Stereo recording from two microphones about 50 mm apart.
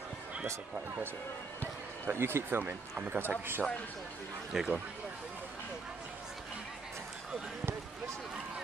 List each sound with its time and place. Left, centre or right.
2.0 s a man's voice: right
3.0 s a man's voice: right
4.5 s speech: centre